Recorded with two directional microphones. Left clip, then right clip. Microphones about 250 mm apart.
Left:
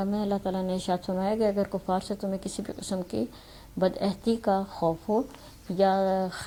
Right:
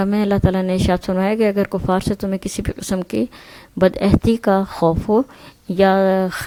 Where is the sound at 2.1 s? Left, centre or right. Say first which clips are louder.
Right 9 dB; right.